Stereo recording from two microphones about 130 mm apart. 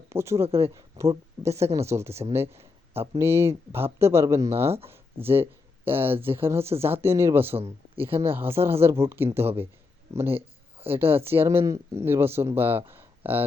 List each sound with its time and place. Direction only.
0.1 s speech: 20° right (ahead or behind)